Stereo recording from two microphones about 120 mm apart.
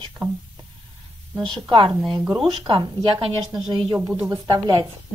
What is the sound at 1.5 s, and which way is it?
A woman's voice, 40° right (ahead or behind).